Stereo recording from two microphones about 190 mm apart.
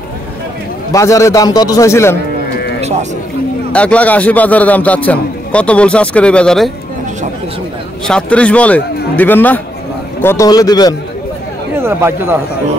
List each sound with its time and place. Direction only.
0.9 s a man's voice: 15° left (ahead or behind)
3.7 s a man's voice: 5° left (ahead or behind)
8.1 s a man's voice: 5° left (ahead or behind)
11.8 s speech: 10° right (ahead or behind)